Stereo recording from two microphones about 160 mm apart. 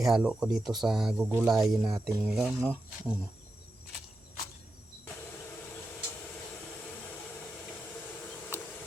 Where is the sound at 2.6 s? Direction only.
15° right (ahead or behind).